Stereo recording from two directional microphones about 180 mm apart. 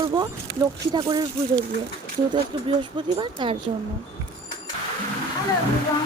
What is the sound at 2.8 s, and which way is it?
Speech, 25° right (ahead or behind).